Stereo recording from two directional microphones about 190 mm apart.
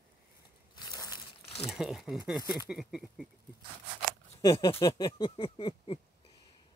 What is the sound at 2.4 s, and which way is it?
Speech, 20° left (ahead or behind).